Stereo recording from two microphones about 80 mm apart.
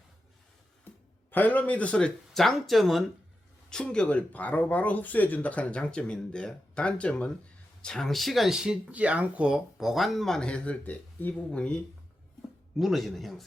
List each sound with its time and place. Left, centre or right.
1.3 s speech: left
12.7 s speech: centre